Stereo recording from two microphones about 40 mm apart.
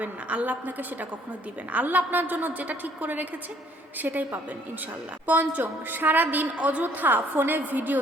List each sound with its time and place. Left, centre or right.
0.0 s a woman's voice: right